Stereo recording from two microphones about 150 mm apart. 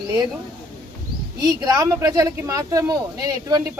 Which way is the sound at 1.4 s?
25° right (ahead or behind).